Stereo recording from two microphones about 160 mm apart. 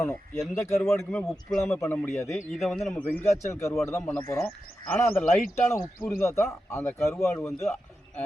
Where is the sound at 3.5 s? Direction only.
15° left (ahead or behind).